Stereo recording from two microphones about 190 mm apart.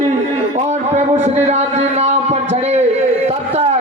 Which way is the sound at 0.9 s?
35° right (ahead or behind).